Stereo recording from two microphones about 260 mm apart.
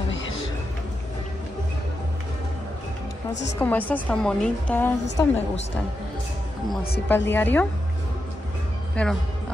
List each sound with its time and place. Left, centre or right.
3.5 s a woman's voice: centre
7.2 s a woman's voice: centre
9.0 s speech: centre